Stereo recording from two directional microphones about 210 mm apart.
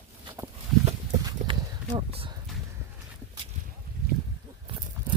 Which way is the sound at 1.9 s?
25° right (ahead or behind).